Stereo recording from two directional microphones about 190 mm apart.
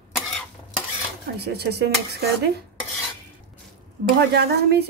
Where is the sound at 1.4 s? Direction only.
60° right (ahead or behind).